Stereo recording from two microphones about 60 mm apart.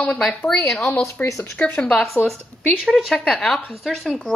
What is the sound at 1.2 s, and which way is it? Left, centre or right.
Speech, left.